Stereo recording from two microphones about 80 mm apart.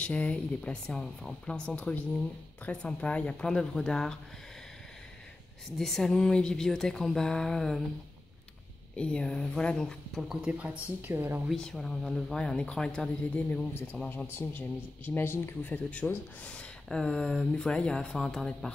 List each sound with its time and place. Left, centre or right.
0.0 s speech: centre
5.8 s speech: centre
8.9 s speech: centre
10.2 s speech: centre; by 11.4 s right
11.5 s speech: centre
14.0 s a man's voice: left; by 18.7 s centre